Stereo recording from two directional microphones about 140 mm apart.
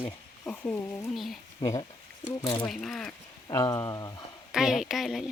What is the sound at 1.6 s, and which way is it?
Speech, 25° left (ahead or behind).